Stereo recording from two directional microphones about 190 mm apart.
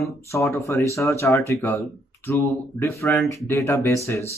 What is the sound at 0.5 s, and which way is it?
Speech, 15° left (ahead or behind).